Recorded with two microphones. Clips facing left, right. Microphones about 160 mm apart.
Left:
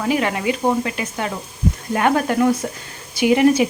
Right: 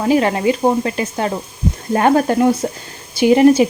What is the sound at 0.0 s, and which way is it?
A woman's voice, 35° right (ahead or behind).